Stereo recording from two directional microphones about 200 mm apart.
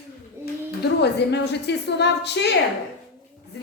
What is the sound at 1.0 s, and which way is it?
A woman's voice, 60° left (ahead or behind).